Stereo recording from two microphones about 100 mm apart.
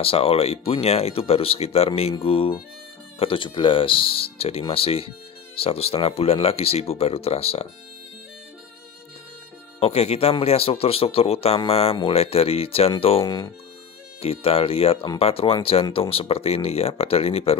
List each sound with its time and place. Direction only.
0.0 s speech: 75° left (ahead or behind)
5.6 s speech: 90° left
9.8 s speech: 90° left; by 13.3 s 70° left (ahead or behind)
14.2 s speech: 80° left